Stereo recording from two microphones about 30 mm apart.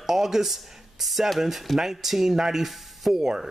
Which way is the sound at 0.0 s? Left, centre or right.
Centre.